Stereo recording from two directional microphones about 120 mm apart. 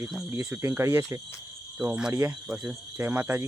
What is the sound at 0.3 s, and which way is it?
Speech, 20° right (ahead or behind).